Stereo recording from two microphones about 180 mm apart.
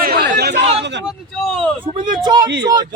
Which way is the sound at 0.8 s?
75° right (ahead or behind).